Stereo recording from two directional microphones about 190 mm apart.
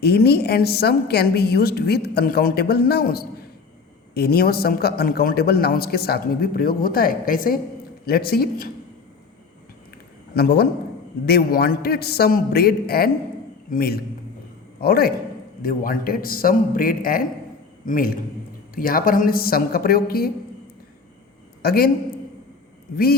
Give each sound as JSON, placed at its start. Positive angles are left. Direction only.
{"t": 0.0, "sound": "a woman's voice", "side_deg": 55}
{"t": 10.3, "sound": "a woman's voice", "side_deg": 55}
{"t": 21.6, "sound": "a man's voice", "side_deg": 55}